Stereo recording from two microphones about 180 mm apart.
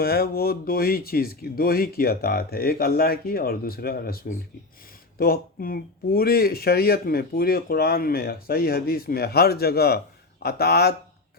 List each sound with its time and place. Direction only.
0.0 s speech: 60° left (ahead or behind)